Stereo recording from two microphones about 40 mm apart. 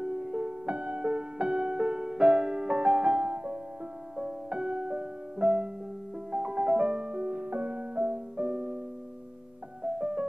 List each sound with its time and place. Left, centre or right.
0.0 s music: right
4.2 s music: right
9.8 s music: right